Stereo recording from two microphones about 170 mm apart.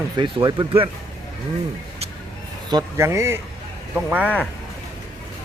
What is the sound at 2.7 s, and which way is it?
Speech, 20° right (ahead or behind).